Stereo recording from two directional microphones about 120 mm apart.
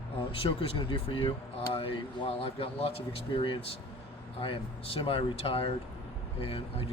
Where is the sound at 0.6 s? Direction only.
50° left (ahead or behind).